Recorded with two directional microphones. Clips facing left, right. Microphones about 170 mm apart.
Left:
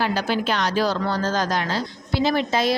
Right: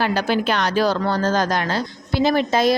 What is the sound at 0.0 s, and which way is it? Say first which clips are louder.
A woman's voice: right 3 dB; 60° right (ahead or behind).